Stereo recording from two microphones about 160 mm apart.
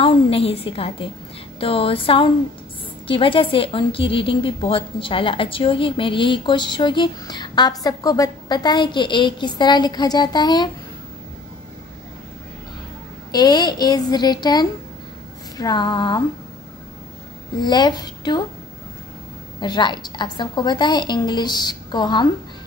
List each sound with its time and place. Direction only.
0.0 s a woman's voice: 35° left (ahead or behind)
13.3 s a woman's voice: 25° left (ahead or behind)
17.6 s a woman's voice: 25° left (ahead or behind)
19.6 s a woman's voice: 25° left (ahead or behind)